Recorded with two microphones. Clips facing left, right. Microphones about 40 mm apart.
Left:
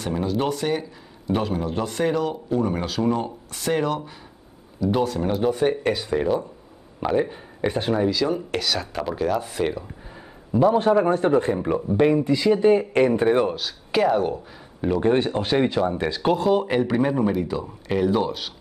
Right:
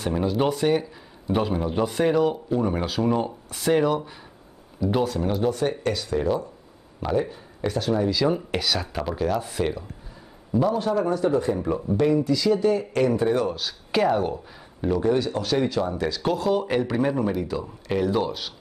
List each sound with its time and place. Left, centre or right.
0.0 s a man's voice: centre; by 8.1 s left
8.1 s a man's voice: centre
10.5 s a man's voice: left
10.8 s speech: left
13.6 s a man's voice: centre
15.0 s speech: left
16.4 s speech: centre